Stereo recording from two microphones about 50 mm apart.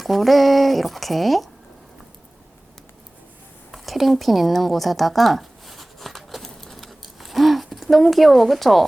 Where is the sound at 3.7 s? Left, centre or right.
Centre.